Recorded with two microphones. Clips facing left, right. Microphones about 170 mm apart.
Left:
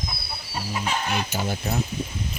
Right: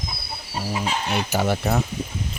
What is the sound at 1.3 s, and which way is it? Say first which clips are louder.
Speech: right 5 dB; 80° right.